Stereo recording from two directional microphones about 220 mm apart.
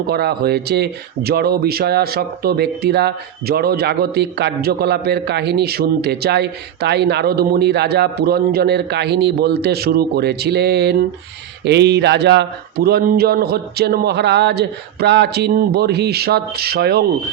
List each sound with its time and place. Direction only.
0.1 s speech: 45° right (ahead or behind)